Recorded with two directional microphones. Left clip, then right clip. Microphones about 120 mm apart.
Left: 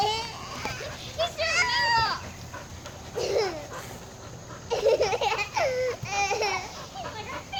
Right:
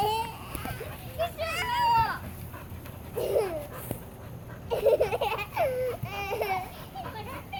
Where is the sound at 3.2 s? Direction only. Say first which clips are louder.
Left 1 dB; 15° right (ahead or behind).